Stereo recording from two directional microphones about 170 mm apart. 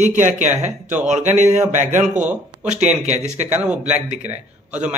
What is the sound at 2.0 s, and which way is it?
A man's voice, 10° right (ahead or behind).